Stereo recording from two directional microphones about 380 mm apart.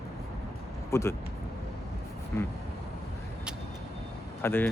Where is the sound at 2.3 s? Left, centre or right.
Centre.